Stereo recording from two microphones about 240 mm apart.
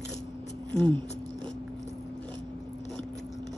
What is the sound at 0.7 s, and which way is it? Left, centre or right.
Speech, centre.